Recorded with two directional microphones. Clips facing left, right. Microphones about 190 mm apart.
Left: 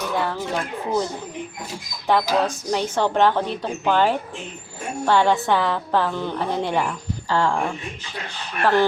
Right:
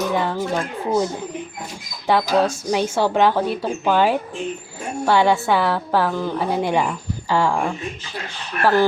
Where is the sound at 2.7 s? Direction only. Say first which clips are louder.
Right 2 dB; 10° right (ahead or behind).